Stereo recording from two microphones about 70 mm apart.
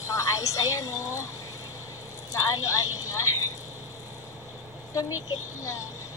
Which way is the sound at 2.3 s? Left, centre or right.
Left.